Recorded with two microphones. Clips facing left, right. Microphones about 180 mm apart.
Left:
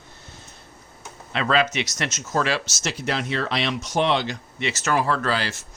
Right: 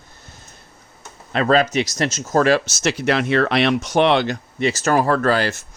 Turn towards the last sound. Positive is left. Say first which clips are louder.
# right 6 dB
turn(degrees=-50)  # may be behind; listen again after turning